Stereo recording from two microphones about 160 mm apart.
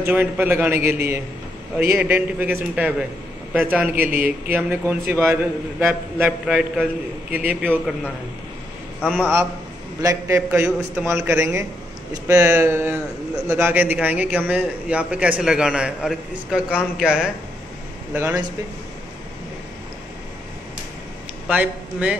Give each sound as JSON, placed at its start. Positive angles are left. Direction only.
{"t": 0.1, "sound": "a man's voice", "side_deg": -10}
{"t": 6.2, "sound": "a man's voice", "side_deg": -5}
{"t": 9.0, "sound": "a man's voice", "side_deg": 5}
{"t": 10.0, "sound": "a man's voice", "side_deg": -20}
{"t": 21.5, "sound": "a man's voice", "side_deg": -10}